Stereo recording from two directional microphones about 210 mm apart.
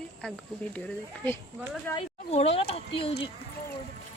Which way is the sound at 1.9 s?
30° left (ahead or behind).